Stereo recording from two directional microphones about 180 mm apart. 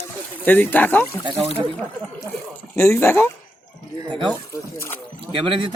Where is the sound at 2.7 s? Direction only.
15° left (ahead or behind).